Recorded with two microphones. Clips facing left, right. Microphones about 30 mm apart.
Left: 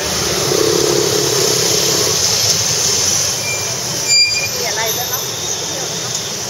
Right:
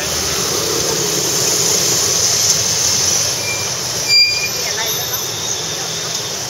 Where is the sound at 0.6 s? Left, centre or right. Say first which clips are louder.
Left 5 dB; left.